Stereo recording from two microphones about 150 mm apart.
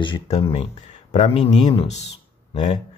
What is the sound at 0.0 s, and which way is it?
Speech, 35° left (ahead or behind).